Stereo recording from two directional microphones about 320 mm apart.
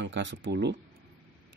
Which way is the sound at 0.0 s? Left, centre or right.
Right.